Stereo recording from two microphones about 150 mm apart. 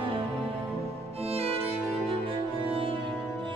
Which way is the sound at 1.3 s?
40° right (ahead or behind).